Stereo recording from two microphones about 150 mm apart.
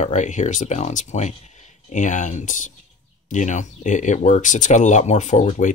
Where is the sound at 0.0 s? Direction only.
50° left (ahead or behind).